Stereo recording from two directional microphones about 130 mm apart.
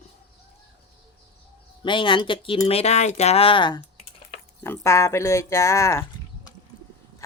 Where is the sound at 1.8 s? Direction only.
40° left (ahead or behind).